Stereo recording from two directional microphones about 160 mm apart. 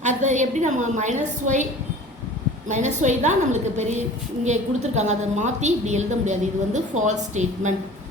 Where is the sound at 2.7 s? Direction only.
50° right (ahead or behind).